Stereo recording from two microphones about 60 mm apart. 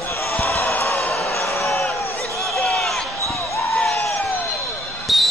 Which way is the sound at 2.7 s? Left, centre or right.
Centre.